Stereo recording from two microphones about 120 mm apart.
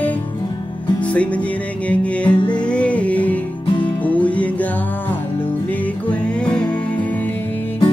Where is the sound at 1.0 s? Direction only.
10° left (ahead or behind).